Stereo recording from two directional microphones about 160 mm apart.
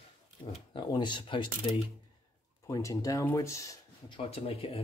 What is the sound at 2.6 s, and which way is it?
Speech, 20° left (ahead or behind).